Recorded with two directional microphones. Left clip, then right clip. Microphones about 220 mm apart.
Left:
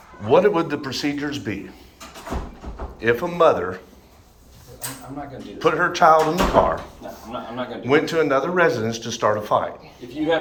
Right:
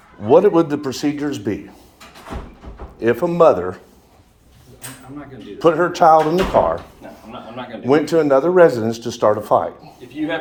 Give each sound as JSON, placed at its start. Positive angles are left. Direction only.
{"t": 0.3, "sound": "a man's voice", "side_deg": -45}
{"t": 3.0, "sound": "a man's voice", "side_deg": -45}
{"t": 5.5, "sound": "a man's voice", "side_deg": -45}